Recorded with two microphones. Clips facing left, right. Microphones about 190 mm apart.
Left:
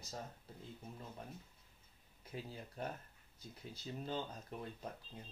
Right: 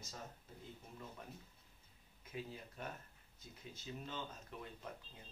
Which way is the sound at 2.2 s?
35° left (ahead or behind).